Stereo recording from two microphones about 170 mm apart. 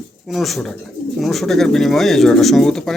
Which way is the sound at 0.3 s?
Centre (ahead or behind).